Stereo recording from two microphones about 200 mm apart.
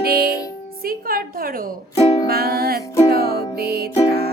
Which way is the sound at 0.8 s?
45° right (ahead or behind).